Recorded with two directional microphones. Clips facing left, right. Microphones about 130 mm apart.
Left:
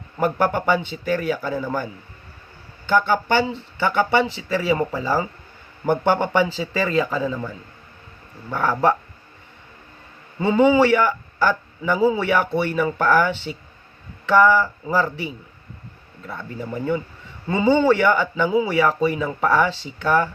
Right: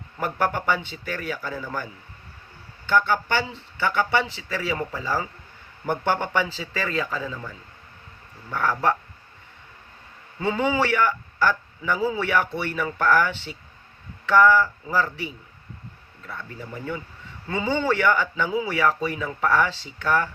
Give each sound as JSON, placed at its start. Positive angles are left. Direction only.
{"t": 0.2, "sound": "speech", "side_deg": 20}
{"t": 10.4, "sound": "speech", "side_deg": 25}
{"t": 12.2, "sound": "speech", "side_deg": 20}
{"t": 17.5, "sound": "speech", "side_deg": 25}